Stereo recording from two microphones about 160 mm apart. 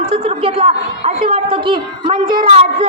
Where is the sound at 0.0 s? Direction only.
35° right (ahead or behind).